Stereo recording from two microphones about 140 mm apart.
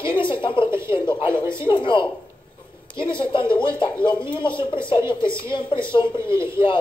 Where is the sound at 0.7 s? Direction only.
20° right (ahead or behind).